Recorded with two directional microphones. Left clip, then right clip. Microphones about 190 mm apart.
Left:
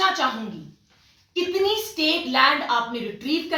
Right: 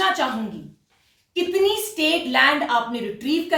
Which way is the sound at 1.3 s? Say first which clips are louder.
Right 2 dB; 10° right (ahead or behind).